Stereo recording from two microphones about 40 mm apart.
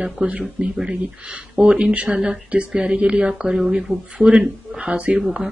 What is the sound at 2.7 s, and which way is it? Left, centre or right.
Speech, right.